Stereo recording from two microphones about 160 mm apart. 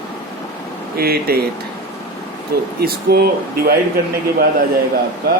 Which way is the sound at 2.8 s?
75° right (ahead or behind).